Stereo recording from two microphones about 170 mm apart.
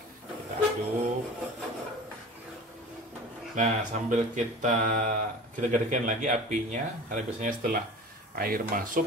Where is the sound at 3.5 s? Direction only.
50° right (ahead or behind).